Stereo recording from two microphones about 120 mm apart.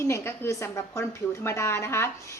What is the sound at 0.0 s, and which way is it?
A woman's voice, 25° left (ahead or behind).